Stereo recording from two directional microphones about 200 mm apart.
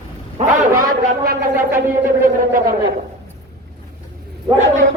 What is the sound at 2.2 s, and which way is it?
Speech, 45° right (ahead or behind).